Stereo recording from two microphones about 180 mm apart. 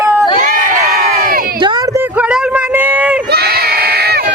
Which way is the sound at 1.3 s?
50° right (ahead or behind).